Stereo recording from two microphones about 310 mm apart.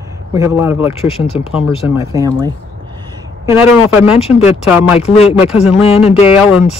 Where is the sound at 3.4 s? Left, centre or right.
Centre.